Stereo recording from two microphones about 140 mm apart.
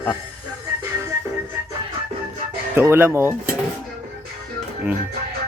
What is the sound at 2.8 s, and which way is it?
Speech, 15° right (ahead or behind).